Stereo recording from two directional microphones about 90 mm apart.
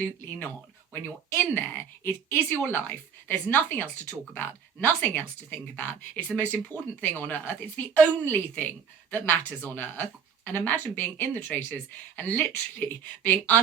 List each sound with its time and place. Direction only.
0.0 s a woman's voice: 20° left (ahead or behind)